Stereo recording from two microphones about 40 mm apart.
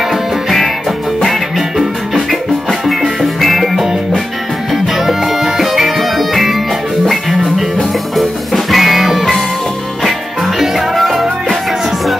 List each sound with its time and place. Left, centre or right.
2.9 s music: centre
10.6 s music: centre